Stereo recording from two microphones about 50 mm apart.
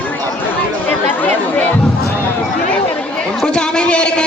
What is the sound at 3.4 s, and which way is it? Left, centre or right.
Speech, centre.